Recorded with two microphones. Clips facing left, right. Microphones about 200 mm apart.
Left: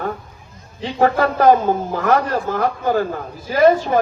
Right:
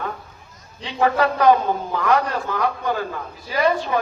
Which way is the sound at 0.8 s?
45° left (ahead or behind).